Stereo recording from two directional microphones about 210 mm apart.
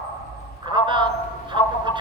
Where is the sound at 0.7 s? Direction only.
25° right (ahead or behind).